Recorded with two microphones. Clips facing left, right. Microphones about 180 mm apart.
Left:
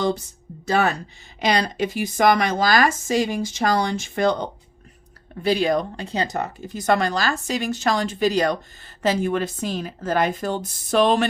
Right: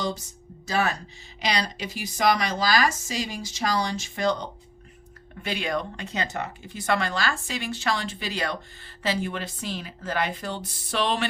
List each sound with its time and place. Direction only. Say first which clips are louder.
1.4 s a woman's voice: left 7 dB; 55° left (ahead or behind)
5.4 s a woman's voice: left 9 dB; 35° left (ahead or behind)